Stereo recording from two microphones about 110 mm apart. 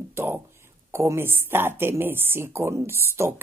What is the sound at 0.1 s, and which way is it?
Speech, 20° right (ahead or behind).